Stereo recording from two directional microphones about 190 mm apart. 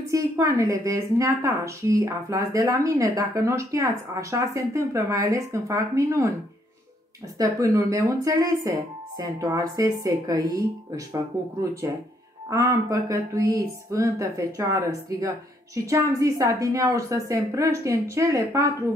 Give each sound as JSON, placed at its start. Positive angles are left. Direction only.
{"t": 0.1, "sound": "a woman's voice", "side_deg": -15}
{"t": 7.3, "sound": "a woman's voice", "side_deg": -15}